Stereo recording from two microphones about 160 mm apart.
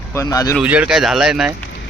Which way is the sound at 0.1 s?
20° left (ahead or behind).